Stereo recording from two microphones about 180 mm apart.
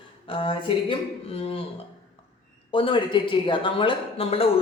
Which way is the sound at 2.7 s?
30° left (ahead or behind).